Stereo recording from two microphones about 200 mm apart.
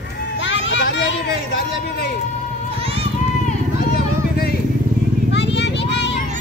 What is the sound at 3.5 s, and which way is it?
Vehicle, 45° left (ahead or behind).